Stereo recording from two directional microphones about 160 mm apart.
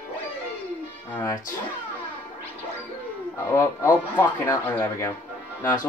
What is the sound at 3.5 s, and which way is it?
Speech, 15° left (ahead or behind).